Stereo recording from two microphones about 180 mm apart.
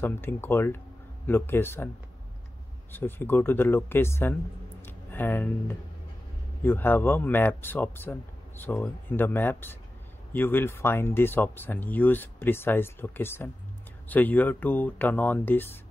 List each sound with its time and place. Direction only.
0.0 s speech: 10° left (ahead or behind)
2.9 s speech: 10° left (ahead or behind)
4.8 s a sound: 10° left (ahead or behind)
6.6 s speech: 10° left (ahead or behind)